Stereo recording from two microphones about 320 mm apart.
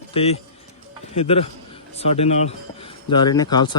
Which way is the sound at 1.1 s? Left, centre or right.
Centre.